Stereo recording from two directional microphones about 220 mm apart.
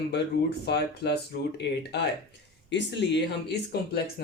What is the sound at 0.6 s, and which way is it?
Speech, 50° left (ahead or behind).